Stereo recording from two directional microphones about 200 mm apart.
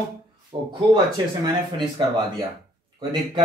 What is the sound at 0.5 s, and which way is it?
Speech, 25° right (ahead or behind).